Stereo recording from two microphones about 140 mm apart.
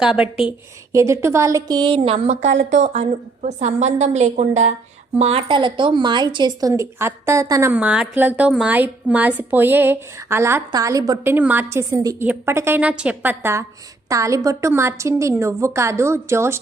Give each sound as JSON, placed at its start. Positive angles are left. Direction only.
{"t": 0.0, "sound": "a woman's voice", "side_deg": -5}
{"t": 0.9, "sound": "a woman's voice", "side_deg": -20}
{"t": 5.2, "sound": "speech", "side_deg": -40}
{"t": 7.7, "sound": "a woman's voice", "side_deg": -10}
{"t": 11.2, "sound": "a woman's voice", "side_deg": -15}